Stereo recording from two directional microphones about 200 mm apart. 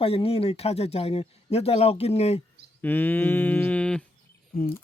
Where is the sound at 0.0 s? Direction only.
30° left (ahead or behind).